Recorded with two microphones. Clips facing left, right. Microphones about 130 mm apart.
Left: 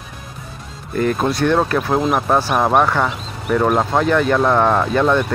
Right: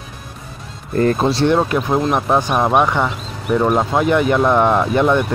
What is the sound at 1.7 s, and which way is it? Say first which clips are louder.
Speech: even; 15° right (ahead or behind).